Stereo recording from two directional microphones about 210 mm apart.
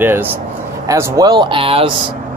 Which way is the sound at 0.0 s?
10° right (ahead or behind).